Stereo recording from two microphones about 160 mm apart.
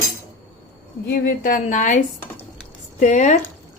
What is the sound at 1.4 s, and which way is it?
A woman's voice, 55° left (ahead or behind).